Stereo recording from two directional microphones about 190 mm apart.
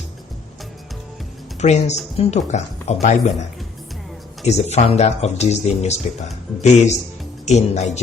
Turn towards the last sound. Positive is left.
turn(degrees=35)  # may be behind; listen again after turning